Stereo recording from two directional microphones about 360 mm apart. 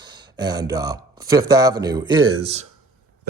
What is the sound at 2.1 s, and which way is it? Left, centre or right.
Speech, right.